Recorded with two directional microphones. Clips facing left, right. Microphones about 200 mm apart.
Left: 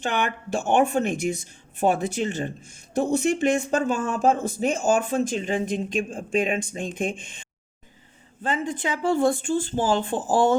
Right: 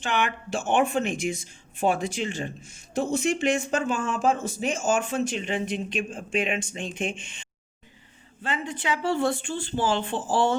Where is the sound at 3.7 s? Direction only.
40° left (ahead or behind).